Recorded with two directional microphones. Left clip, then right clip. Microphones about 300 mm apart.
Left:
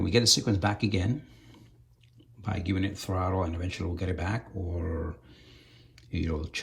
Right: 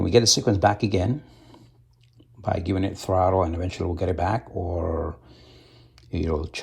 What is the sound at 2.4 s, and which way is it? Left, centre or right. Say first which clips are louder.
Speech: right 7 dB; centre.